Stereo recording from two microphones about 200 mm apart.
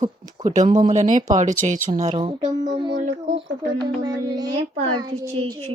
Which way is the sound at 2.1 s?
25° right (ahead or behind).